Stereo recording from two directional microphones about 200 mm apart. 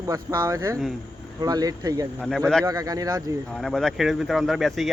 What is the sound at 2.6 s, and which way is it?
Speech, 15° right (ahead or behind).